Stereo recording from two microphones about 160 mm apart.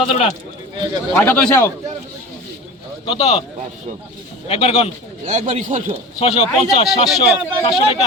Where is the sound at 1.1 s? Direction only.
10° left (ahead or behind).